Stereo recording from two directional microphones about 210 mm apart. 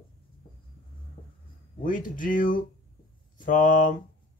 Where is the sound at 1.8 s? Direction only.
40° left (ahead or behind).